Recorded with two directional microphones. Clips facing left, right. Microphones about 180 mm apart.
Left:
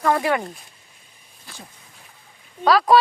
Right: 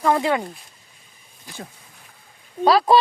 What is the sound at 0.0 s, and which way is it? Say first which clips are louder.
Speech: right 1 dB; 15° right (ahead or behind).